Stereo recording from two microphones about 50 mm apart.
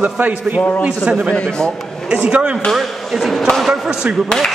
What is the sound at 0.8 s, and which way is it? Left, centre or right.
A man's voice, centre.